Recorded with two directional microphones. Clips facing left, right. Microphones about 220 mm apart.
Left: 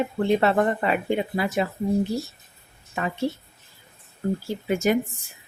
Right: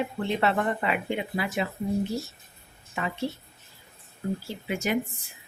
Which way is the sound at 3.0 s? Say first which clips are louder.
Left 3 dB; 45° left (ahead or behind).